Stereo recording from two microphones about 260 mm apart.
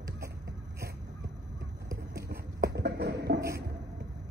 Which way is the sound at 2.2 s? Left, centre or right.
Right.